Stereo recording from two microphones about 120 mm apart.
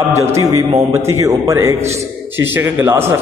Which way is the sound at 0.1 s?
25° right (ahead or behind).